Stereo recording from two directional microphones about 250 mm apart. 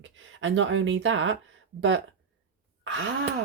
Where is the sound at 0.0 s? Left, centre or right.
Right.